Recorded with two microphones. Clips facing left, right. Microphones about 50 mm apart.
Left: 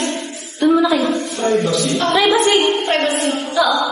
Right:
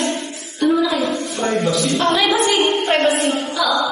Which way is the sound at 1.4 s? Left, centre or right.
Centre.